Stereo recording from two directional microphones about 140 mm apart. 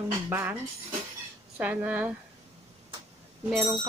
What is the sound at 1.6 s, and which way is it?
Speech, 10° right (ahead or behind).